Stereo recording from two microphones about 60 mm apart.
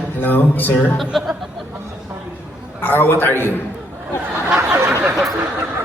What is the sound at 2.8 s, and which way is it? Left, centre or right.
Speech, left.